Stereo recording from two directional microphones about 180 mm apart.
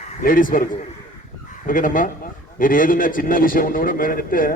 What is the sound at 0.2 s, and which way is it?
A man's voice, 50° left (ahead or behind).